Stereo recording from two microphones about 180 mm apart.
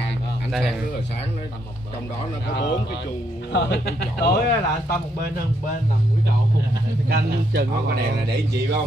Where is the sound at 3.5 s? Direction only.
65° left (ahead or behind).